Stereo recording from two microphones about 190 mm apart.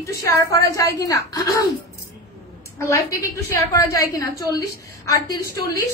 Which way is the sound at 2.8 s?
15° left (ahead or behind).